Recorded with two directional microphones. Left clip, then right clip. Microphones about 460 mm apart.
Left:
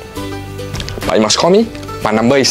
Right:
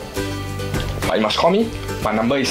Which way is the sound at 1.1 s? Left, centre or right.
Left.